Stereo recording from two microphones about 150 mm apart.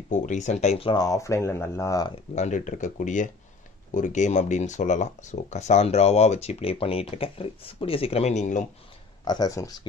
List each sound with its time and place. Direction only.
0.1 s speech: 55° left (ahead or behind)
0.9 s speech: 25° left (ahead or behind)
2.3 s speech: 50° left (ahead or behind)
9.2 s speech: 25° left (ahead or behind)